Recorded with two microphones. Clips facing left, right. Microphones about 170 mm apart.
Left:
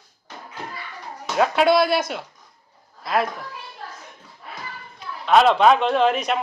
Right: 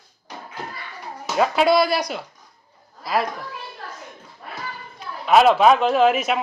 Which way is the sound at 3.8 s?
65° right (ahead or behind).